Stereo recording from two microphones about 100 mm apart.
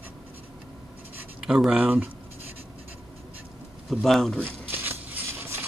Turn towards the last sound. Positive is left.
turn(degrees=-25)  # may be behind; listen again after turning